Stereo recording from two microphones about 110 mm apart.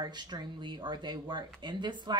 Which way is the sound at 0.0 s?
40° right (ahead or behind).